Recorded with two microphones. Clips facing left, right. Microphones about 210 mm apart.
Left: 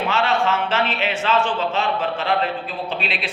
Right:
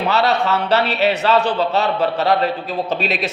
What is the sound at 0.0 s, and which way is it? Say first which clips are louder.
A man's voice: right 3 dB; 40° right (ahead or behind).